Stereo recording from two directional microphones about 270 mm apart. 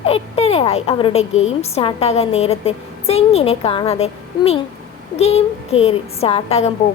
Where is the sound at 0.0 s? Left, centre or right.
Left.